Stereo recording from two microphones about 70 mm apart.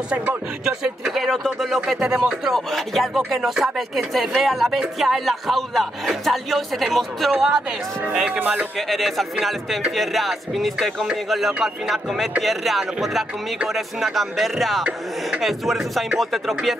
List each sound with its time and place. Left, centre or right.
0.1 s speech: centre
1.0 s speech: centre
2.5 s speech: centre
8.3 s speech: right
8.7 s speech: centre